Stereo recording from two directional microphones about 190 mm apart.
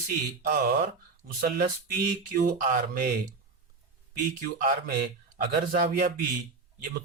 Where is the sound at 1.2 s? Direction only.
50° right (ahead or behind).